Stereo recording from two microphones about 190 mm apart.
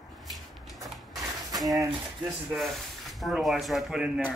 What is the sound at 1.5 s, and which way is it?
Speech, 20° right (ahead or behind).